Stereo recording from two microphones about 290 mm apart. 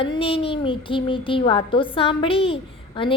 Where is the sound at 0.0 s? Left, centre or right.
Centre.